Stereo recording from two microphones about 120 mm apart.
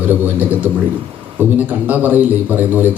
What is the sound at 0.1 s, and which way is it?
A man's voice, 15° right (ahead or behind).